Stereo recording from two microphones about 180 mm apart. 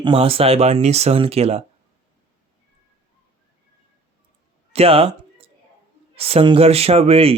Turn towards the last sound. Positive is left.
turn(degrees=-35)  # may be behind; listen again after turning